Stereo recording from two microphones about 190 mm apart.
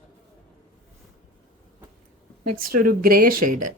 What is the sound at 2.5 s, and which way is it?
Speech, 50° right (ahead or behind).